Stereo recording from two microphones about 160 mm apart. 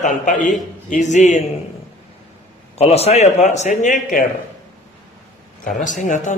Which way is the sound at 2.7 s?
40° left (ahead or behind).